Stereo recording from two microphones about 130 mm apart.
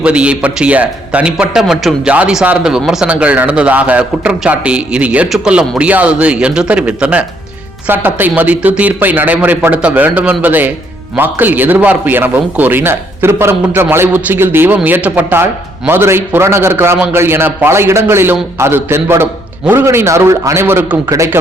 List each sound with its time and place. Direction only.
0.0 s a man's voice: 10° right (ahead or behind)